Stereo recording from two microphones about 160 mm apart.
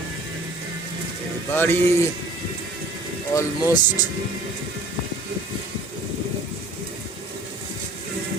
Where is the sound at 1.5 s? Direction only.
15° left (ahead or behind).